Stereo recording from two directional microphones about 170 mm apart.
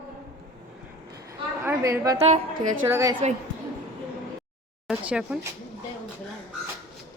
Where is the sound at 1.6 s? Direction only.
15° right (ahead or behind).